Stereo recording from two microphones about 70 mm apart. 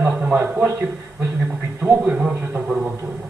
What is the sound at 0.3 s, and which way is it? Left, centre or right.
Speech, right.